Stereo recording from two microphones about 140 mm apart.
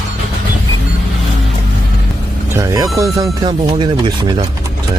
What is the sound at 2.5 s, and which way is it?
Vehicle, 25° right (ahead or behind).